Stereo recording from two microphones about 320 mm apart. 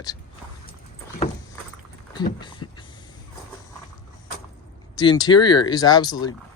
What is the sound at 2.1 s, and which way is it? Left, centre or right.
Speech, centre.